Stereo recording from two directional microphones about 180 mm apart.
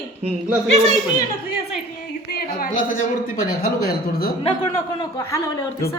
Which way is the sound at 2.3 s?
60° left (ahead or behind).